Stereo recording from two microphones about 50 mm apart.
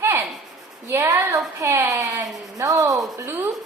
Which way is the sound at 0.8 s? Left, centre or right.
Right.